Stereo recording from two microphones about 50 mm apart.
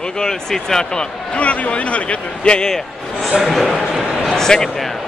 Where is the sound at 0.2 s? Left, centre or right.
Centre.